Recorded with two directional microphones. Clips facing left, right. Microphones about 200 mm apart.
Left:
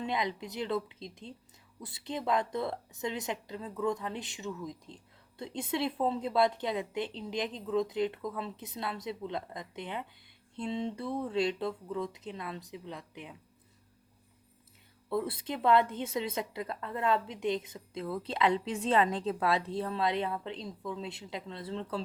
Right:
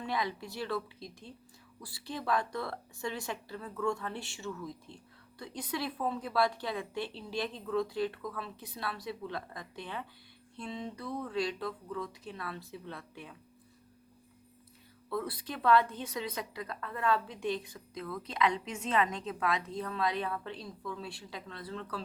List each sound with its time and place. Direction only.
0.0 s a woman's voice: 20° left (ahead or behind)
15.1 s a woman's voice: 25° left (ahead or behind)